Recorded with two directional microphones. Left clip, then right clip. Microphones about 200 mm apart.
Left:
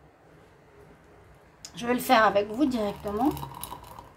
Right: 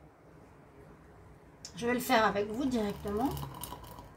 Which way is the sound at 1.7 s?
50° left (ahead or behind).